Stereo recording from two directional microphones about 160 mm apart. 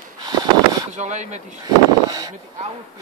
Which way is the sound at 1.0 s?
45° right (ahead or behind).